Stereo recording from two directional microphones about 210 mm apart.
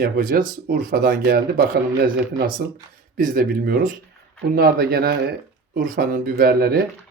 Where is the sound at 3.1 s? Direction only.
40° right (ahead or behind).